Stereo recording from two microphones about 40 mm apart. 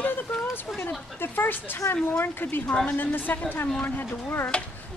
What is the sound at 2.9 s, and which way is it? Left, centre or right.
Speech, left.